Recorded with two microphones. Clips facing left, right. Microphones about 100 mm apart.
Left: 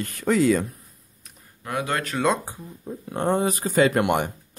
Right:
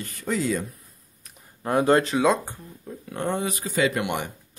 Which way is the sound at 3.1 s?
35° left (ahead or behind).